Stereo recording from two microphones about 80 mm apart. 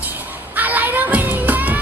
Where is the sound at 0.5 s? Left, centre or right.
Right.